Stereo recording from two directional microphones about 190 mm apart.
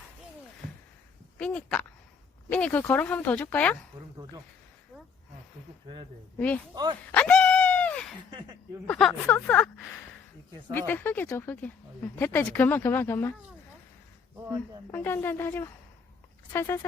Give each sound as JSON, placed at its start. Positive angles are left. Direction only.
{"t": 1.4, "sound": "speech", "side_deg": 5}
{"t": 7.1, "sound": "dog", "side_deg": 5}
{"t": 8.3, "sound": "a sound", "side_deg": -25}
{"t": 8.9, "sound": "speech", "side_deg": 0}
{"t": 14.9, "sound": "speech", "side_deg": 10}